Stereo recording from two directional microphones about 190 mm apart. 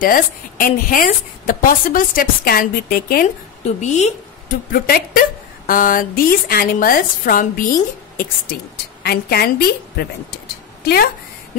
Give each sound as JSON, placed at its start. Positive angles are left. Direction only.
{"t": 0.0, "sound": "a woman's voice", "side_deg": 50}
{"t": 3.6, "sound": "a woman's voice", "side_deg": 35}
{"t": 9.0, "sound": "a woman's voice", "side_deg": 55}